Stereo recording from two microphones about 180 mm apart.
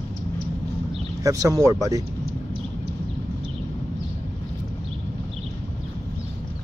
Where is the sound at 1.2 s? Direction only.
20° right (ahead or behind).